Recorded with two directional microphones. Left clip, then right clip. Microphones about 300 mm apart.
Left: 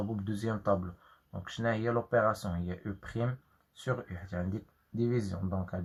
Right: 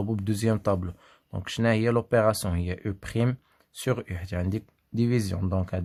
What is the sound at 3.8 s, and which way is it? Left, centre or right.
Speech, right.